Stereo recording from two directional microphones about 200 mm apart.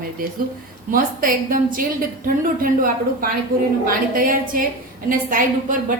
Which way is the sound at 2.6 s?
45° right (ahead or behind).